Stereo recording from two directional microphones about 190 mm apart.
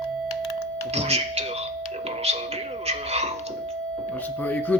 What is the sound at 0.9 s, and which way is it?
Music, 35° right (ahead or behind).